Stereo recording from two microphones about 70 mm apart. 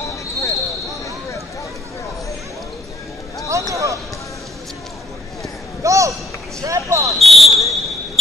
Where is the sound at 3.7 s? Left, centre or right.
Right.